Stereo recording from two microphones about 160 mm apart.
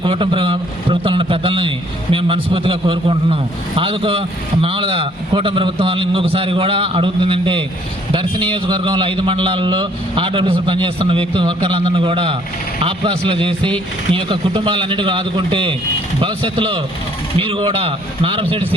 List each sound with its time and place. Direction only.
0.0 s a man's voice: 30° right (ahead or behind)